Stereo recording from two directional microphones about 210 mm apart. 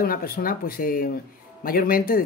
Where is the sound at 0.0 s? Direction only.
45° left (ahead or behind).